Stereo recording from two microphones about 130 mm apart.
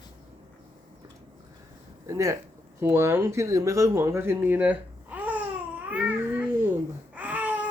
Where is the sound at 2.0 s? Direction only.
25° right (ahead or behind).